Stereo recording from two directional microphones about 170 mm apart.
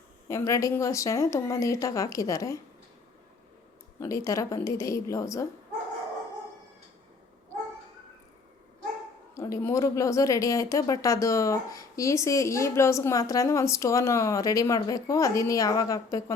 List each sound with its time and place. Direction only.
0.3 s speech: 20° left (ahead or behind)
4.0 s a woman's voice: 20° left (ahead or behind)
9.3 s speech: 20° left (ahead or behind)